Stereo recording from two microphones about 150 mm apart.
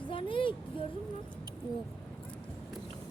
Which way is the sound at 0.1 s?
35° left (ahead or behind).